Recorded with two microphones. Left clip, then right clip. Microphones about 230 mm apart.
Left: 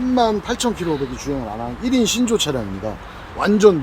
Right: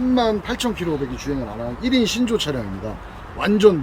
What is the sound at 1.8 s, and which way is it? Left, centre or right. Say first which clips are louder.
Speech: left 2 dB; left.